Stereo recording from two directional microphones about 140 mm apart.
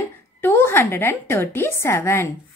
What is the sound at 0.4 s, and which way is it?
A woman's voice, 15° left (ahead or behind).